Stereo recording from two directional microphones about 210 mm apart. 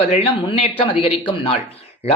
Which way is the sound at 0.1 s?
25° left (ahead or behind).